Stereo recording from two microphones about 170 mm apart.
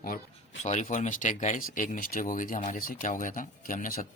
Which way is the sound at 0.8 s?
50° left (ahead or behind).